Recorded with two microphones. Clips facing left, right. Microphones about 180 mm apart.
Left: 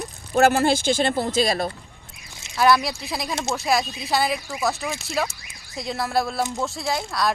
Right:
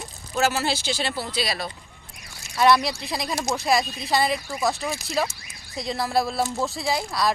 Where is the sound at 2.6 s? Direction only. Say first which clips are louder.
Even; centre (ahead or behind).